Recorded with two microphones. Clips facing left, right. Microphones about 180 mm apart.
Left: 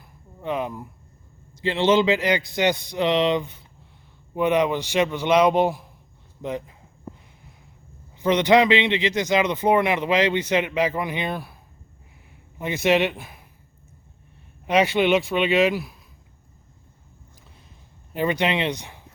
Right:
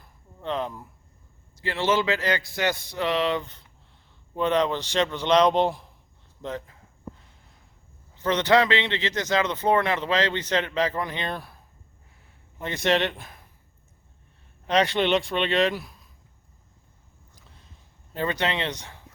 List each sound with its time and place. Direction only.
0.0 s a sound: 10° left (ahead or behind)
1.5 s speech: 20° left (ahead or behind)
8.1 s speech: 15° left (ahead or behind)
12.5 s speech: 10° left (ahead or behind)
14.7 s speech: 5° left (ahead or behind)
18.1 s speech: 15° left (ahead or behind)